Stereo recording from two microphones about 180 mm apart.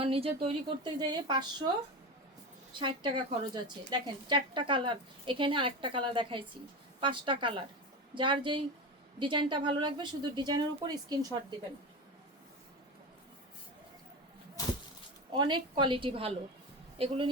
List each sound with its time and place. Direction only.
0.0 s speech: 30° right (ahead or behind)
2.7 s speech: 25° right (ahead or behind)
15.4 s a woman's voice: 25° right (ahead or behind)